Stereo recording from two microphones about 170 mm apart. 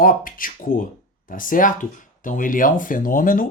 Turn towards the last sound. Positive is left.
turn(degrees=55)  # may be behind; listen again after turning